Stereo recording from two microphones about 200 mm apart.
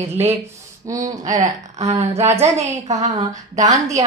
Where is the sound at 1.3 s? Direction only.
35° right (ahead or behind).